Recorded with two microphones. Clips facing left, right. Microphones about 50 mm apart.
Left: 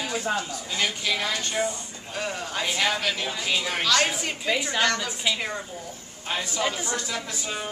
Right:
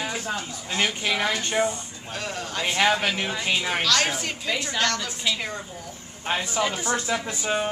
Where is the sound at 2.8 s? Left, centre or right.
Right.